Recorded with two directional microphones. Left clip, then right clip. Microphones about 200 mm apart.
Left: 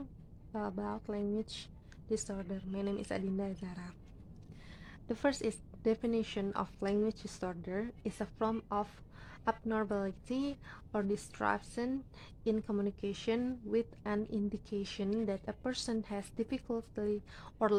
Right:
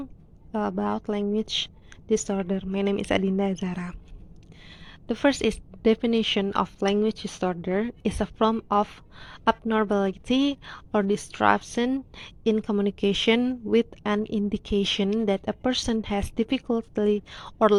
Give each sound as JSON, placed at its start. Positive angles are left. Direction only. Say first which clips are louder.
{"t": 0.5, "sound": "a woman's voice", "louder": "right 12 dB", "side_deg": -25}
{"t": 4.6, "sound": "a woman's voice", "louder": "right 10 dB", "side_deg": -20}